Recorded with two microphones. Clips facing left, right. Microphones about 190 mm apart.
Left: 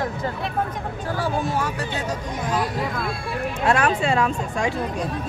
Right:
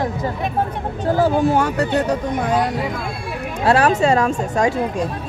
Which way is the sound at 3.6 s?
35° right (ahead or behind).